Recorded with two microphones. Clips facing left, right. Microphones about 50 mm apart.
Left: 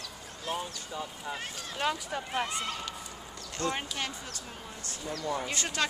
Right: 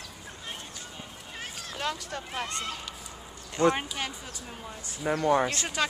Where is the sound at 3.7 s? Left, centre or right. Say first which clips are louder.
Right 2 dB; centre.